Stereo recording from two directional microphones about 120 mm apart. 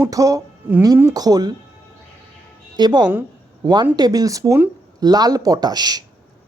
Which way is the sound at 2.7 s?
35° right (ahead or behind).